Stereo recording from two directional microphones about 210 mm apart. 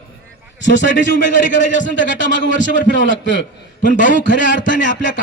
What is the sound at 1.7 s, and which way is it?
A man's voice, 60° left (ahead or behind).